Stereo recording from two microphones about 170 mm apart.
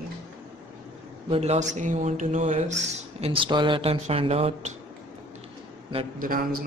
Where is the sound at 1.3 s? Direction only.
40° right (ahead or behind).